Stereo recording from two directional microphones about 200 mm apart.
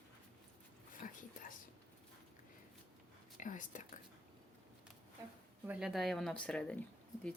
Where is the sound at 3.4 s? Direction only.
40° left (ahead or behind).